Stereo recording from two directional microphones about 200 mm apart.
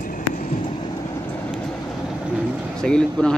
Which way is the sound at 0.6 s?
25° left (ahead or behind).